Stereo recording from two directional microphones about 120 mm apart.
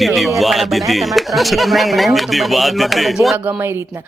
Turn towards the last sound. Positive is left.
turn(degrees=-20)  # may be behind; listen again after turning